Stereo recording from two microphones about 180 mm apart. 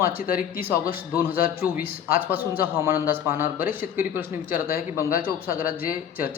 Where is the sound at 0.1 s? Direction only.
55° left (ahead or behind).